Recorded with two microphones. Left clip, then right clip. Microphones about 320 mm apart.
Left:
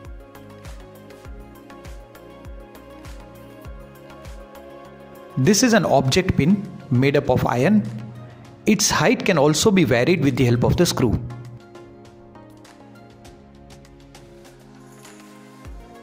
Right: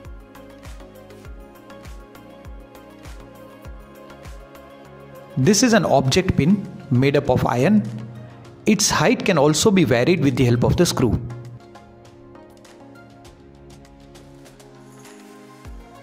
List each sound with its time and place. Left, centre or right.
5.4 s speech: right